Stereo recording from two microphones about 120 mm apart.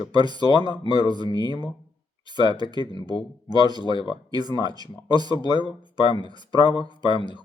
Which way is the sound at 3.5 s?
35° right (ahead or behind).